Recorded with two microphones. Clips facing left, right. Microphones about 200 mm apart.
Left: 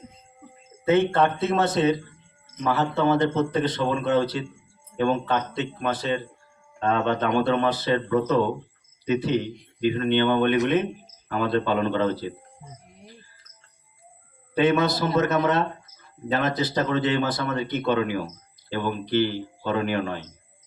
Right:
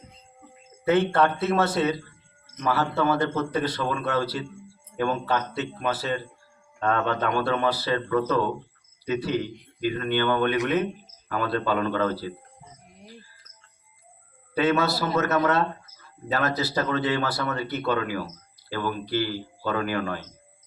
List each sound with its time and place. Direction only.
0.9 s a man's voice: 20° left (ahead or behind)
5.5 s speech: 5° right (ahead or behind)
6.7 s a man's voice: 20° left (ahead or behind)
14.6 s a man's voice: 20° left (ahead or behind)